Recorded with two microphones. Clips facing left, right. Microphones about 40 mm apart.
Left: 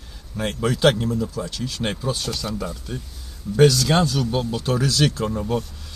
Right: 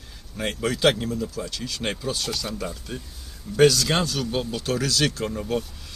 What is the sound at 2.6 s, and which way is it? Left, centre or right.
Speech, centre.